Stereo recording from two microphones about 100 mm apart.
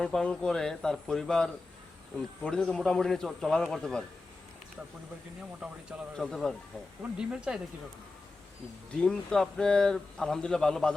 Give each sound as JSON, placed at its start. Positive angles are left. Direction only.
{"t": 0.0, "sound": "a man's voice", "side_deg": 5}
{"t": 5.6, "sound": "a man's voice", "side_deg": -5}
{"t": 7.0, "sound": "speech", "side_deg": -10}
{"t": 8.9, "sound": "a man's voice", "side_deg": 10}